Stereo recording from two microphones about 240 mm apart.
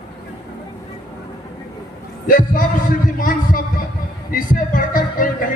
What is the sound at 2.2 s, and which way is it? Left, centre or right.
A man's voice, left.